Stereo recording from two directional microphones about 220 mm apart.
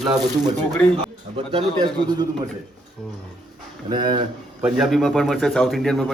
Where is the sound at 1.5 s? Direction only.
20° right (ahead or behind).